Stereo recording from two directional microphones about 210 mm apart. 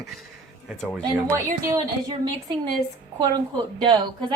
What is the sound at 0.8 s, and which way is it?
Speech, 5° left (ahead or behind).